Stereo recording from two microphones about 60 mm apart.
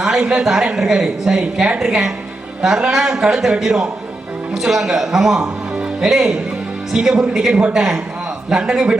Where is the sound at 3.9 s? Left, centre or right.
Centre.